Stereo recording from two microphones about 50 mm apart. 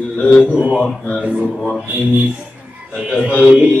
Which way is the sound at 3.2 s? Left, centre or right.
Left.